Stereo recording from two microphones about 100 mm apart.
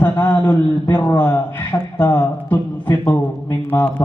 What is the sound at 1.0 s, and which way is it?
A man's voice, 20° left (ahead or behind).